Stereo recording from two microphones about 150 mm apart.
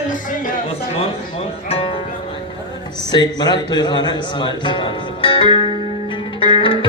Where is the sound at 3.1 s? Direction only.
30° left (ahead or behind).